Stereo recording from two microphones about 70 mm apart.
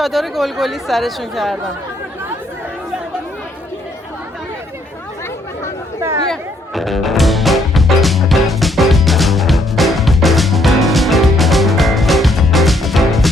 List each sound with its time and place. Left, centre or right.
0.0 s speech: centre
6.0 s chatter: right
6.2 s music: centre